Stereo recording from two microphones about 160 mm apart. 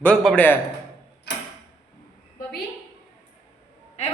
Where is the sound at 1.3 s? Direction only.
90° left.